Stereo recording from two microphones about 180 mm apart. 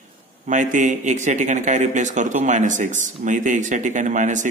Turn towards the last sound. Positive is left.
turn(degrees=-45)  # may be behind; listen again after turning